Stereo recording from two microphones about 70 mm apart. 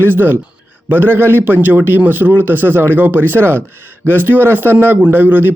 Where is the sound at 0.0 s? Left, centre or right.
Right.